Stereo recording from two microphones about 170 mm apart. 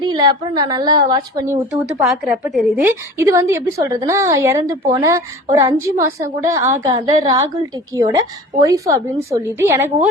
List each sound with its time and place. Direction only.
0.0 s a woman's voice: 25° right (ahead or behind)
1.7 s a woman's voice: centre (ahead or behind)
2.8 s a woman's voice: 15° right (ahead or behind)